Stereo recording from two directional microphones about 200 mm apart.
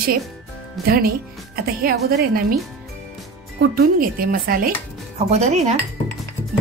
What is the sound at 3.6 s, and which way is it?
Speech, 50° right (ahead or behind).